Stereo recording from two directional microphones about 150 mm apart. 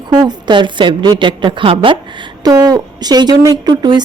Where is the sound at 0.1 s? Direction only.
30° right (ahead or behind).